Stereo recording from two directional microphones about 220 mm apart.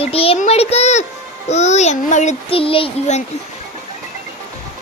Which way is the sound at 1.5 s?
30° left (ahead or behind).